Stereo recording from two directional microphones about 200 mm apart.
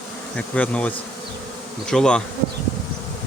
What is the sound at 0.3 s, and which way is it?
Bee, 5° left (ahead or behind).